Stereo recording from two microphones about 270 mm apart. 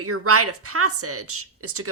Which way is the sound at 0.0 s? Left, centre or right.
Right.